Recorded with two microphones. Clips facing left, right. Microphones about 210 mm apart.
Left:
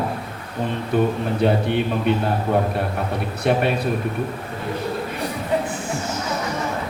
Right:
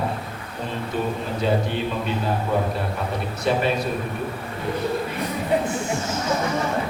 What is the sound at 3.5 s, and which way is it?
Speech, 60° left (ahead or behind).